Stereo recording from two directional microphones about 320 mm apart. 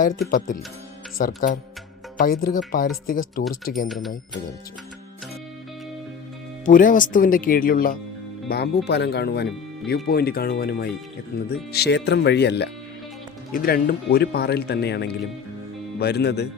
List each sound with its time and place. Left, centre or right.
0.3 s speech: left
3.8 s speech: centre
6.7 s speech: left